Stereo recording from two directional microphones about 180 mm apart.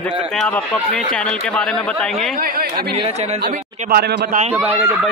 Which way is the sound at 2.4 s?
55° right (ahead or behind).